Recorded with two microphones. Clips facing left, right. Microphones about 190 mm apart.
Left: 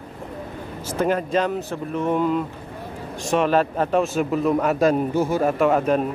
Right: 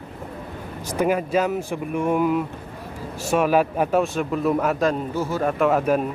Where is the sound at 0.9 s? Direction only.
10° right (ahead or behind); by 5.4 s 15° left (ahead or behind).